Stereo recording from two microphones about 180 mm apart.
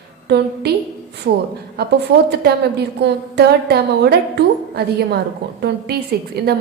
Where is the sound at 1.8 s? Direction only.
65° right (ahead or behind).